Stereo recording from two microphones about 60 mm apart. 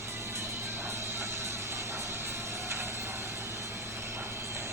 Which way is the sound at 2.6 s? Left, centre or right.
Right.